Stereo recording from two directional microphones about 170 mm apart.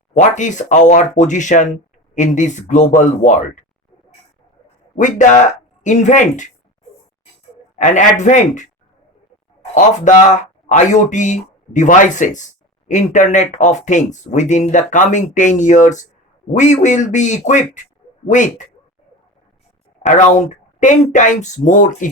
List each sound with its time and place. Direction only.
0.1 s speech: 45° left (ahead or behind)
4.9 s speech: 50° left (ahead or behind)
7.8 s speech: 45° left (ahead or behind)
9.7 s speech: 45° left (ahead or behind)
20.0 s speech: 45° left (ahead or behind)